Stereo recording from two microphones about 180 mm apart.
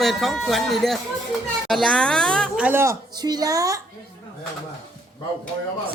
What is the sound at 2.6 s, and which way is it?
Speech, 10° right (ahead or behind).